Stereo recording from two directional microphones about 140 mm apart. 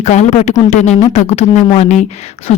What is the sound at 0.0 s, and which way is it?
Speech, 55° left (ahead or behind).